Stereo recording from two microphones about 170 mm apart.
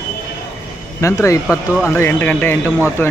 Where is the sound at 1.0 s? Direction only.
15° left (ahead or behind).